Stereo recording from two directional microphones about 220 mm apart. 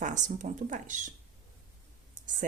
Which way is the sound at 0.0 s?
35° right (ahead or behind).